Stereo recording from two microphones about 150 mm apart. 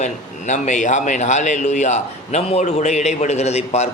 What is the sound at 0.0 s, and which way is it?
Speech, 50° left (ahead or behind).